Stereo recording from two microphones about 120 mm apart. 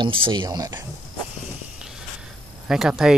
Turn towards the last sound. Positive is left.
turn(degrees=-5)  # may be behind; listen again after turning